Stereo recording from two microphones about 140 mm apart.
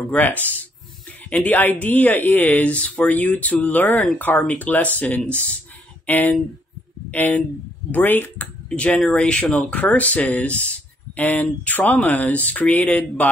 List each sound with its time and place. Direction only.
0.1 s speech: 10° left (ahead or behind)